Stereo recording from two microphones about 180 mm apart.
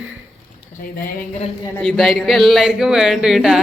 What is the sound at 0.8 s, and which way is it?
Speech, 50° left (ahead or behind).